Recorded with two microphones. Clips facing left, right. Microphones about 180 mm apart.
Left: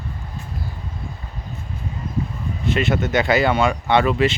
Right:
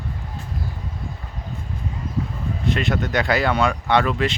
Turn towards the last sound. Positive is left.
turn(degrees=5)  # may be behind; listen again after turning